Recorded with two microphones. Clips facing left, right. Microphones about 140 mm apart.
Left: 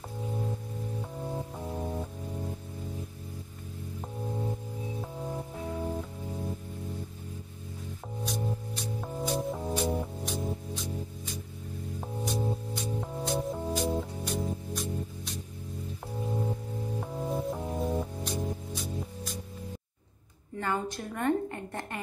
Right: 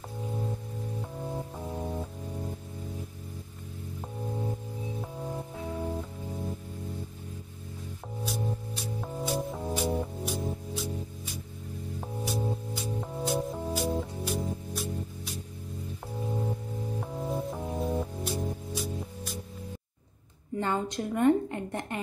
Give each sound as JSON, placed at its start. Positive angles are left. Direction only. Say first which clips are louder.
{"t": 1.2, "sound": "music", "louder": "even", "side_deg": 0}
{"t": 5.0, "sound": "music", "louder": "even", "side_deg": 0}
{"t": 8.2, "sound": "music", "louder": "even", "side_deg": 0}
{"t": 20.5, "sound": "a sound", "louder": "right 2 dB", "side_deg": -20}